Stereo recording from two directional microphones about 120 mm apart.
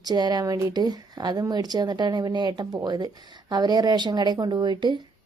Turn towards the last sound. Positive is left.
turn(degrees=-40)  # may be behind; listen again after turning